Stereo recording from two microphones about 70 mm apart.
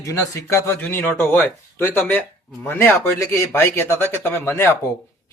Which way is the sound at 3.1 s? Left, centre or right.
Left.